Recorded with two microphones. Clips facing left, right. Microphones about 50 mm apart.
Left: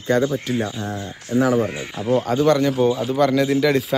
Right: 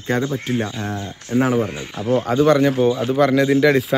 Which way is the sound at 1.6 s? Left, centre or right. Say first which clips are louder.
Even; centre.